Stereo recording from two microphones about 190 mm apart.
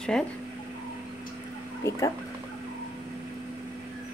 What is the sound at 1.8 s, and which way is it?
Speech, 15° left (ahead or behind).